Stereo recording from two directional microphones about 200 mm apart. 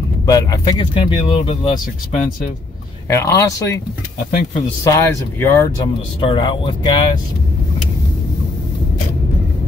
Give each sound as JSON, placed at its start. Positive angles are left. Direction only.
{"t": 0.3, "sound": "speech", "side_deg": 20}
{"t": 3.1, "sound": "speech", "side_deg": 15}
{"t": 4.3, "sound": "speech", "side_deg": 40}
{"t": 4.8, "sound": "speech", "side_deg": 15}
{"t": 6.2, "sound": "speech", "side_deg": 25}